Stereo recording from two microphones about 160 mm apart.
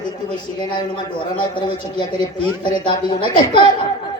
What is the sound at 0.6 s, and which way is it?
A man's voice, 30° left (ahead or behind).